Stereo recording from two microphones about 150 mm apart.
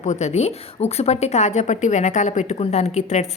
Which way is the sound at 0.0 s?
50° left (ahead or behind).